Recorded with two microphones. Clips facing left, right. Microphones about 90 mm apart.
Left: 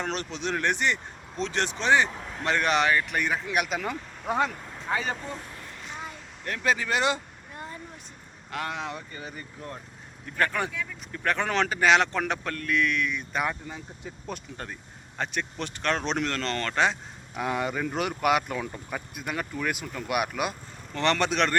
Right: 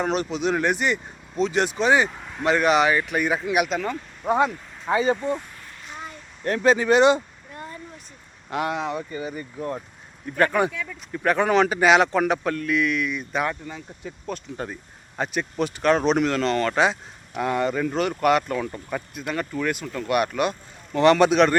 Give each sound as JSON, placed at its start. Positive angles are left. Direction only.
{"t": 0.0, "sound": "speech", "side_deg": -10}
{"t": 3.7, "sound": "speech", "side_deg": 5}
{"t": 4.9, "sound": "speech", "side_deg": -20}
{"t": 6.4, "sound": "speech", "side_deg": -30}
{"t": 7.5, "sound": "a sound", "side_deg": 20}
{"t": 8.4, "sound": "speech", "side_deg": -20}
{"t": 8.7, "sound": "speech", "side_deg": -5}
{"t": 9.6, "sound": "speech", "side_deg": -25}
{"t": 13.5, "sound": "speech", "side_deg": 10}
{"t": 14.5, "sound": "speech", "side_deg": -10}
{"t": 17.4, "sound": "speech", "side_deg": 5}
{"t": 20.9, "sound": "speech", "side_deg": -10}